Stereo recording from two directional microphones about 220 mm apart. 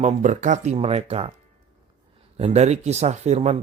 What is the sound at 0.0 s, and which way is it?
Speech, 35° right (ahead or behind).